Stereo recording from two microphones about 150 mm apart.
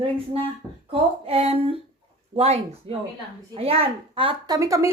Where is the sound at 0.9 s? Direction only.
40° right (ahead or behind).